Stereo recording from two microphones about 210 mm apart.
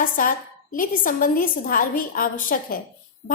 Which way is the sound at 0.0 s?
40° left (ahead or behind).